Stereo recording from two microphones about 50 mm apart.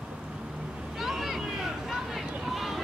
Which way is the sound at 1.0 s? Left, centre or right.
Centre.